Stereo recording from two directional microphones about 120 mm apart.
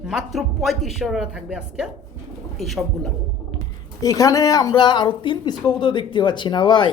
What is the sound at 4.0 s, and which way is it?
Speech, 30° left (ahead or behind).